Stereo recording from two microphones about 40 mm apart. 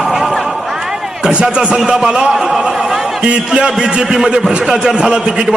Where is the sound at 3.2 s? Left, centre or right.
Right.